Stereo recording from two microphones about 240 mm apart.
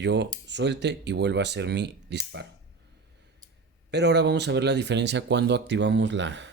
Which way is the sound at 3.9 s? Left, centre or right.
Right.